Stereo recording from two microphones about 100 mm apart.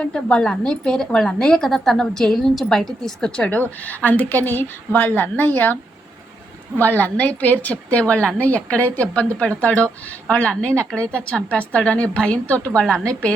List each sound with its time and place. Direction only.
0.0 s a woman's voice: 10° left (ahead or behind)
6.7 s speech: 15° left (ahead or behind)